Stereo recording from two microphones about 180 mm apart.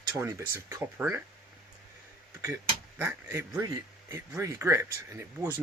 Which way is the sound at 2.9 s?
15° right (ahead or behind).